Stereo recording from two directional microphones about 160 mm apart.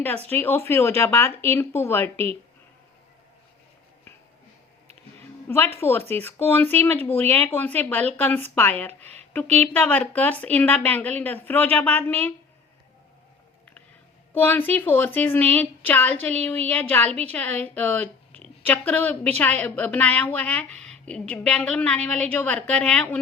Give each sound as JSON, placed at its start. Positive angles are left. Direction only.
{"t": 0.3, "sound": "a woman's voice", "side_deg": 15}
{"t": 5.5, "sound": "a woman's voice", "side_deg": 15}
{"t": 14.3, "sound": "a woman's voice", "side_deg": 10}